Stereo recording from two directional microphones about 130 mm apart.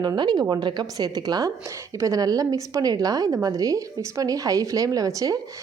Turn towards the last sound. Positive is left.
turn(degrees=-25)  # may be behind; listen again after turning